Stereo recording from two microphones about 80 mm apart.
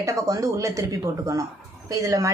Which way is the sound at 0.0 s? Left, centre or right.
Right.